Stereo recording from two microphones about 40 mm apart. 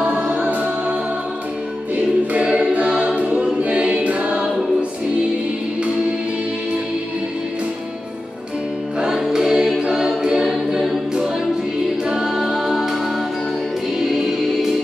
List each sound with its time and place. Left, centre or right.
0.0 s music: right
2.3 s a capella: right
3.2 s choir: right
9.3 s choir: centre
12.1 s music: centre
13.9 s music: centre